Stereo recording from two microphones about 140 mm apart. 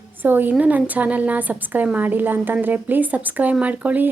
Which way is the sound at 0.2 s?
15° right (ahead or behind).